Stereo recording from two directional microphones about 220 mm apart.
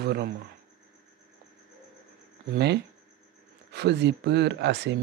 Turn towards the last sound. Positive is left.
turn(degrees=-50)  # may be behind; listen again after turning